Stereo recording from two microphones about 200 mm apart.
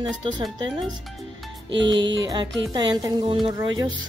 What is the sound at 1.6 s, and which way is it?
Speech, 65° right (ahead or behind).